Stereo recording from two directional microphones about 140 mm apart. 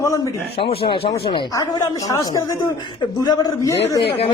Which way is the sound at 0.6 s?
40° left (ahead or behind).